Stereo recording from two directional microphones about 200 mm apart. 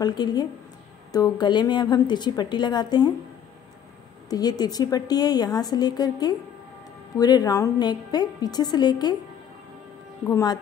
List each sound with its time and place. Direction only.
0.0 s a woman's voice: 20° left (ahead or behind)
4.3 s a woman's voice: 20° left (ahead or behind)
10.2 s speech: 15° left (ahead or behind)